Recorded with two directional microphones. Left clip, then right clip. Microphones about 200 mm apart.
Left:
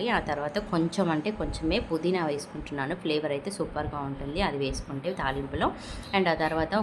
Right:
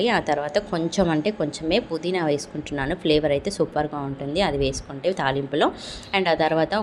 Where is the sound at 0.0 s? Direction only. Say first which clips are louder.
Right 6 dB; 25° right (ahead or behind).